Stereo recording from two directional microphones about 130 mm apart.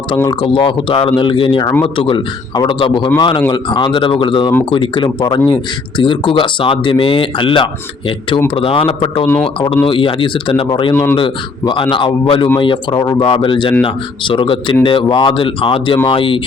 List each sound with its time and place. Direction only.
0.3 s a man's voice: 40° left (ahead or behind)
10.9 s a man's voice: 20° left (ahead or behind)
11.2 s speech: 40° left (ahead or behind)